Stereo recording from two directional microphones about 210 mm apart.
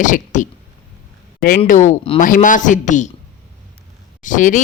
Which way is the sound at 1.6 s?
35° left (ahead or behind).